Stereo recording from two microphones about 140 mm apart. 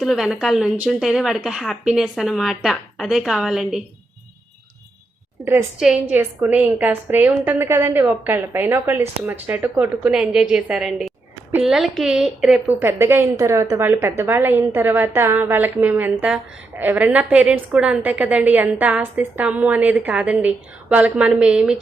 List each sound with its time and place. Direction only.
0.0 s a woman's voice: centre (ahead or behind)
5.5 s a woman's voice: 15° right (ahead or behind)